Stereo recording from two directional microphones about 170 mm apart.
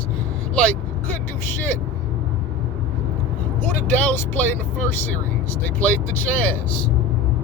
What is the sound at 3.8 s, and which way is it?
Speech, 10° left (ahead or behind).